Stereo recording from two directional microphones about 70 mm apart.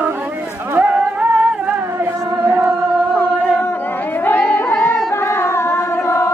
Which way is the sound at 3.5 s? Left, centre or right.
Left.